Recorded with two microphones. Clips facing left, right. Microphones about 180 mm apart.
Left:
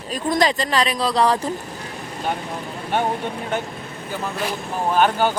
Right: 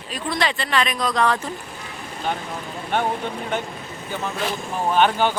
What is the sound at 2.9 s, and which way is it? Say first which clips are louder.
Speech: left 1 dB; 10° left (ahead or behind).